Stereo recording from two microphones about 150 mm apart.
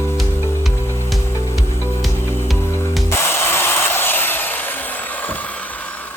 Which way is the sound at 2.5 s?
15° left (ahead or behind).